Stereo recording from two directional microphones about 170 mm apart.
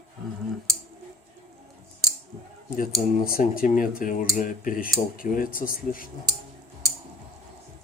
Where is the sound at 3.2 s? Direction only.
55° left (ahead or behind).